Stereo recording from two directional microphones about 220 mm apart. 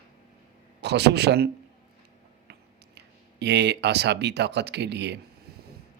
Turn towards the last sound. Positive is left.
turn(degrees=-50)  # may be behind; listen again after turning